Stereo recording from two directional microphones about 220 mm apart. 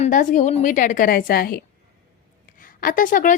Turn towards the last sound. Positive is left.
turn(degrees=35)  # may be behind; listen again after turning